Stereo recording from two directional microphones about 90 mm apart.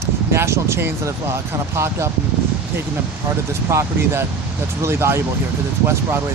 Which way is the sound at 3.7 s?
30° right (ahead or behind).